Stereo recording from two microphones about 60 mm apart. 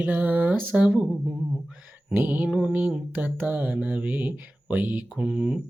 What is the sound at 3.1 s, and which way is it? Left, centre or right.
Speech, right.